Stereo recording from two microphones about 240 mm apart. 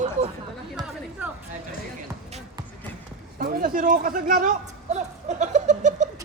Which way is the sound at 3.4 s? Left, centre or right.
Right.